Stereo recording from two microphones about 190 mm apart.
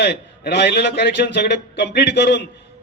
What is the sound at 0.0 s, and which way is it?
A man's voice, 60° left (ahead or behind).